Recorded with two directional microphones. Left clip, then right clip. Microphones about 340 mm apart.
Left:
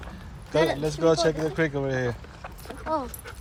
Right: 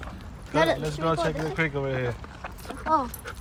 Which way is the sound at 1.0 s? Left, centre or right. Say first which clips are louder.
Left 5 dB; centre.